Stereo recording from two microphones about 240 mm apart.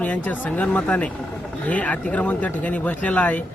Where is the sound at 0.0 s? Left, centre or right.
Centre.